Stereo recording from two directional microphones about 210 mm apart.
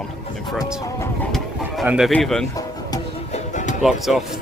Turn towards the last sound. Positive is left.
turn(degrees=0)  # may be behind; listen again after turning